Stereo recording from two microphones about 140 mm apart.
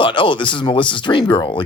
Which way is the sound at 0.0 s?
35° left (ahead or behind).